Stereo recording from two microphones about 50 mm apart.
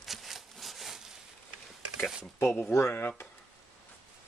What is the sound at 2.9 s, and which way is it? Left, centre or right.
Speech, left.